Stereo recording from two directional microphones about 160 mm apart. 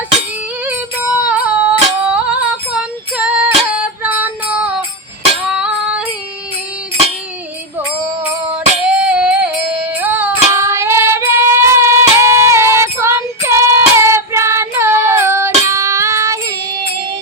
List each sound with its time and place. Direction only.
0.6 s music: 10° right (ahead or behind)
5.5 s female singing: 5° right (ahead or behind)
9.0 s music: 5° right (ahead or behind)
10.0 s child singing: 10° right (ahead or behind)